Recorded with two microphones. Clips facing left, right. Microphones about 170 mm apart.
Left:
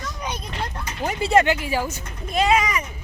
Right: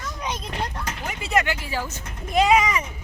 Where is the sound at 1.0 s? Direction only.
30° left (ahead or behind).